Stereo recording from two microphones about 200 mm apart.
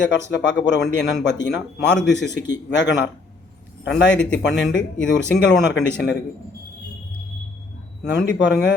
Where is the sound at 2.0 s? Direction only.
60° left (ahead or behind).